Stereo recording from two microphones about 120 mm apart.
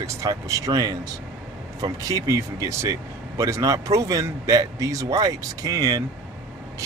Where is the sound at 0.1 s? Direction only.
25° right (ahead or behind).